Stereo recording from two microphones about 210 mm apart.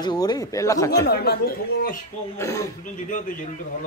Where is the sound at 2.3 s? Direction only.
15° left (ahead or behind).